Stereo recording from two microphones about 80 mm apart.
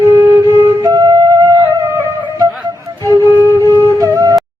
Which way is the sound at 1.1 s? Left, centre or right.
Right.